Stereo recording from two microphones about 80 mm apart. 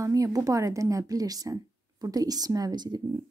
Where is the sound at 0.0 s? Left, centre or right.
Right.